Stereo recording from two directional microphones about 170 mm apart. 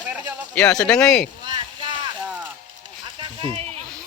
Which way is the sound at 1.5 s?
30° right (ahead or behind).